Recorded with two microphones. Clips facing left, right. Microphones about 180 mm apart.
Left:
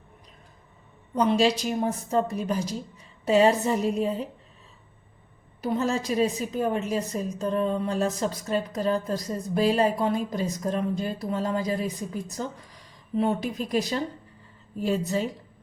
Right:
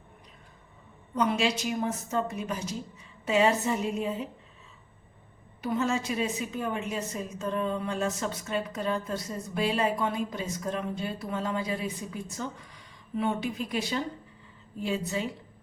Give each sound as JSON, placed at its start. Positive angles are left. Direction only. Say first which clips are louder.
{"t": 1.1, "sound": "a woman's voice", "louder": "left 5 dB", "side_deg": 35}
{"t": 5.6, "sound": "a woman's voice", "louder": "left 3 dB", "side_deg": 35}